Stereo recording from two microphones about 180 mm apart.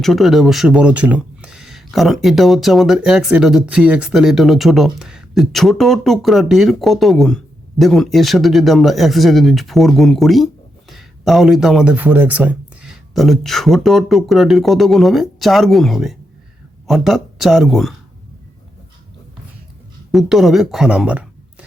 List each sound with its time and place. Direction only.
0.0 s speech: centre (ahead or behind)
20.1 s speech: centre (ahead or behind)